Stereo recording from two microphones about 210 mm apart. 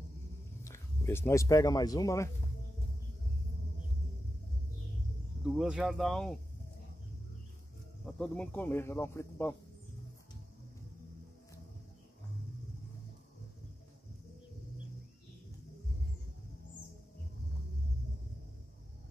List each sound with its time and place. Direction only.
0.7 s speech: 10° left (ahead or behind)
5.4 s speech: 5° right (ahead or behind)
8.0 s speech: 5° left (ahead or behind)